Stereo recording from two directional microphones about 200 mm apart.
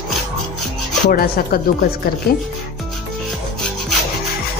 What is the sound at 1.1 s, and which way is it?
Speech, 45° left (ahead or behind).